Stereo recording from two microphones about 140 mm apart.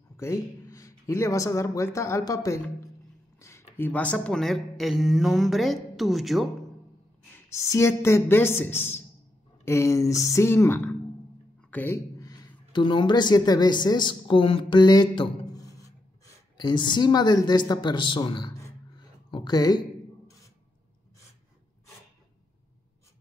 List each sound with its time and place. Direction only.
0.2 s speech: 20° left (ahead or behind); by 6.5 s centre (ahead or behind)
7.4 s speech: 20° left (ahead or behind)
12.2 s a woman's voice: 30° left (ahead or behind)